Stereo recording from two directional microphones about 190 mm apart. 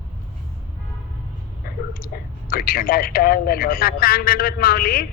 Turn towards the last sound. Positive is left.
turn(degrees=50)  # may be behind; listen again after turning